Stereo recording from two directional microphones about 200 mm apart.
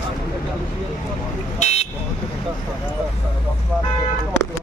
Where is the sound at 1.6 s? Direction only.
35° left (ahead or behind).